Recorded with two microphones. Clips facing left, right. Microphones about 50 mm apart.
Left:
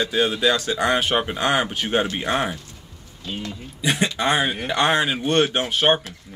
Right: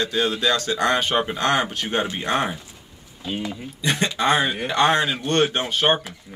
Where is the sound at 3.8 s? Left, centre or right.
Centre.